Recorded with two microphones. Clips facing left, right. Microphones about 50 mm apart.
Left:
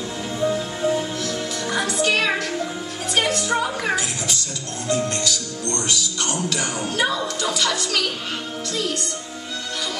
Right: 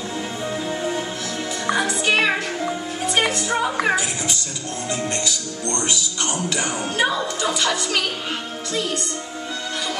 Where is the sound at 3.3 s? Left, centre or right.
Centre.